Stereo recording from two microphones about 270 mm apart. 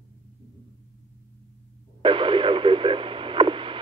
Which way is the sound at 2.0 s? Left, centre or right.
Centre.